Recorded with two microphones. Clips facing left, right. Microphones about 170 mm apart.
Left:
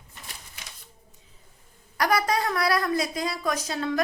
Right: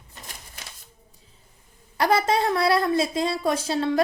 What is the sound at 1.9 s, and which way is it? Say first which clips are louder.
A woman's voice: right 3 dB; 25° right (ahead or behind).